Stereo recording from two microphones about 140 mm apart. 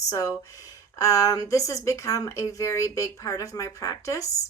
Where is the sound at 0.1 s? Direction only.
25° left (ahead or behind).